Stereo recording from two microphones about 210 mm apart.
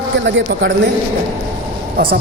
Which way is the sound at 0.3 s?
60° right (ahead or behind).